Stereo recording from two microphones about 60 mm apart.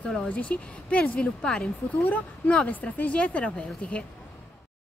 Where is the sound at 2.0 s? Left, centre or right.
Left.